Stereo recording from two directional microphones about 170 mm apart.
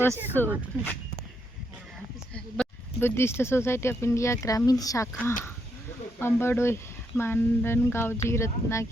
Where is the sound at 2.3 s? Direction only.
10° left (ahead or behind).